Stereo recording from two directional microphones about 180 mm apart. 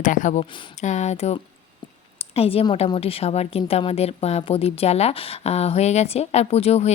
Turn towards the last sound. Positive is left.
turn(degrees=35)  # may be behind; listen again after turning